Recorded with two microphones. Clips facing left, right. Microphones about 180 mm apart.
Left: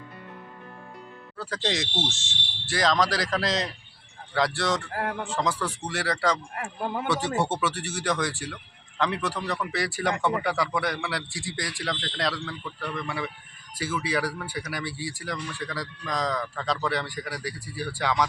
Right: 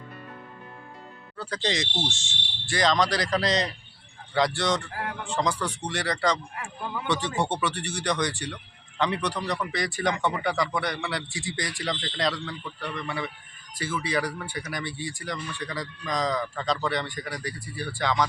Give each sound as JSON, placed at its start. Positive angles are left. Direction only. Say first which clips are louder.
{"t": 1.4, "sound": "speech", "louder": "even", "side_deg": 5}
{"t": 6.6, "sound": "speech", "louder": "left 4 dB", "side_deg": 45}
{"t": 7.1, "sound": "speech", "louder": "right 1 dB", "side_deg": 5}